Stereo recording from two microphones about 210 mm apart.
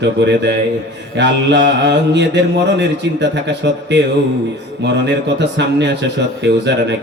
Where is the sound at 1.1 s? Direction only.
55° right (ahead or behind).